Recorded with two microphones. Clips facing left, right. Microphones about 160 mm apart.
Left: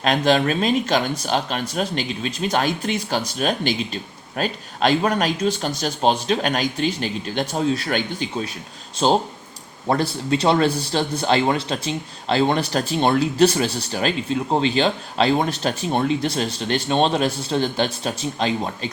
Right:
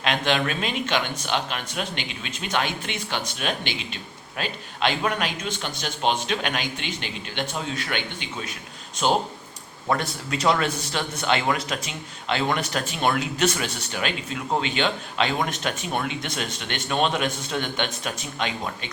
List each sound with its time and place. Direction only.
0.0 s a man's voice: 40° left (ahead or behind)